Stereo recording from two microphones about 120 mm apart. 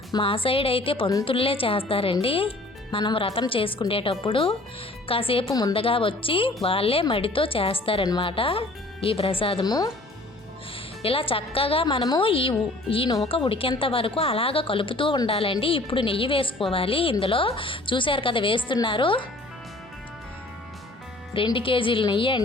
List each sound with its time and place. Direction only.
0.2 s a woman's voice: 50° left (ahead or behind)
9.6 s speech: 35° left (ahead or behind)
11.0 s a woman's voice: 50° left (ahead or behind)
12.0 s speech: 35° left (ahead or behind)
12.3 s a woman's voice: 50° left (ahead or behind)
21.3 s a woman's voice: 45° left (ahead or behind)